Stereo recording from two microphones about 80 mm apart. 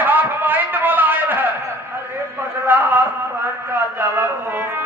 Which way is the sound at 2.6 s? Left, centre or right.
Right.